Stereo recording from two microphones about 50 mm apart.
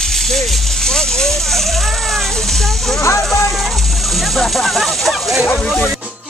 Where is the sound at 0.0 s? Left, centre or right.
Centre.